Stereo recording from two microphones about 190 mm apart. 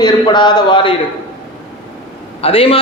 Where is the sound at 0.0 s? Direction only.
25° left (ahead or behind).